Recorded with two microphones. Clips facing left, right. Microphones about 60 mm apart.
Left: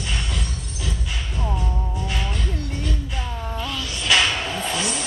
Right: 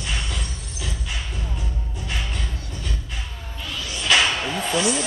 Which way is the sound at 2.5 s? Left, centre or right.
Left.